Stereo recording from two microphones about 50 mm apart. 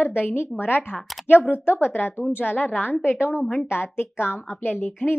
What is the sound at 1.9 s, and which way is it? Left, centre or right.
A woman's voice, left.